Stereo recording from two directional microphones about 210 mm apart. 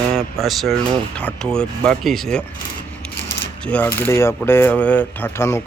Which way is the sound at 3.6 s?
5° left (ahead or behind).